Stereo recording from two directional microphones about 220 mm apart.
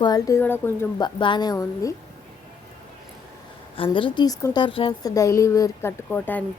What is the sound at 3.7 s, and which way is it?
A woman's voice, 25° left (ahead or behind).